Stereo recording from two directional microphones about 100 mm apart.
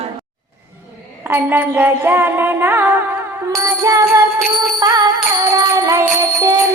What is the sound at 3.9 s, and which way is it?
Music, 30° right (ahead or behind).